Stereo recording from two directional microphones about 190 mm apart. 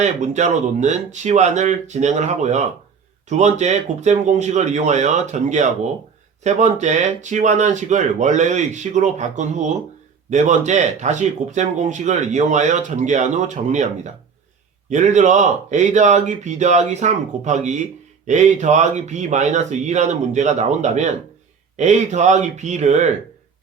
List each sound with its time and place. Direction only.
0.0 s speech: 40° right (ahead or behind)